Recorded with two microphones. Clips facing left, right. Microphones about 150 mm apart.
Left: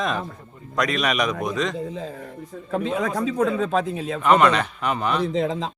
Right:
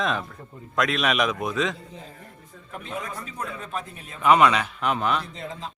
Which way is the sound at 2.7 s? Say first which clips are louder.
Left 10 dB; 90° left.